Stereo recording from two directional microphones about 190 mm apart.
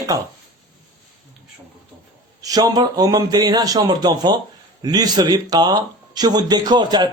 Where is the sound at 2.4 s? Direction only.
20° right (ahead or behind).